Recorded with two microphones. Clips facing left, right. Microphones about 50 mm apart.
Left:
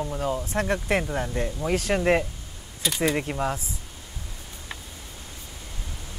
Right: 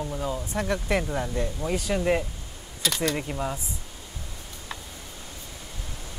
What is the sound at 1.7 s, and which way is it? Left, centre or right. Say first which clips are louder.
Speech: left 3 dB; left.